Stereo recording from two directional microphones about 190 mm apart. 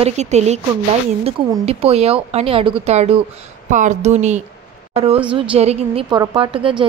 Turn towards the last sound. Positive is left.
turn(degrees=-25)  # may be behind; listen again after turning